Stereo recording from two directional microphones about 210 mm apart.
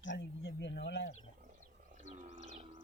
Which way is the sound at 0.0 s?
60° left (ahead or behind).